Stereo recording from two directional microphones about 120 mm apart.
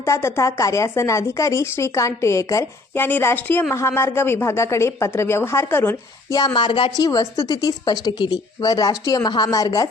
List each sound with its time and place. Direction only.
0.0 s speech: 20° left (ahead or behind)
6.3 s speech: 35° left (ahead or behind)
6.9 s speech: 30° left (ahead or behind)